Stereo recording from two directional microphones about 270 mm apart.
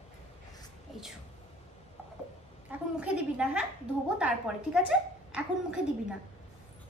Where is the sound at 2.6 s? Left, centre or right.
Centre.